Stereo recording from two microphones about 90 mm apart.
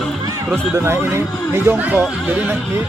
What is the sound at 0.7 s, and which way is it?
Speech, 30° right (ahead or behind).